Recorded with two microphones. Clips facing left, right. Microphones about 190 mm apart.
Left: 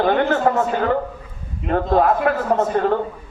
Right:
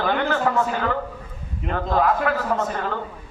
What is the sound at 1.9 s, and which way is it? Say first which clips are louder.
Speech: left 3 dB; 50° left (ahead or behind).